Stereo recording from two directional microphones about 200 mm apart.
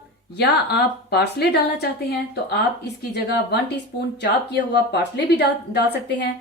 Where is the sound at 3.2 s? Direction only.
60° left (ahead or behind).